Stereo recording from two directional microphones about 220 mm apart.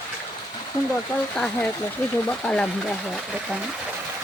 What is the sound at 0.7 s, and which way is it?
Speech, 15° left (ahead or behind).